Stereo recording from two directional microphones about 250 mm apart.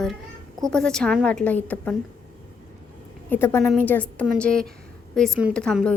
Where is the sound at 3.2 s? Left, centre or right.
Centre.